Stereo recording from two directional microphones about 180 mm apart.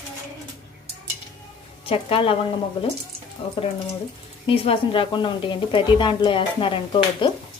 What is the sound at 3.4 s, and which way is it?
A woman's voice, 30° left (ahead or behind).